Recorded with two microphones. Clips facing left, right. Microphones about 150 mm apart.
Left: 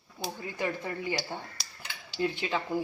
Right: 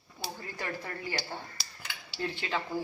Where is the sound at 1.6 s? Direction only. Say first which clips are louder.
Even; centre (ahead or behind).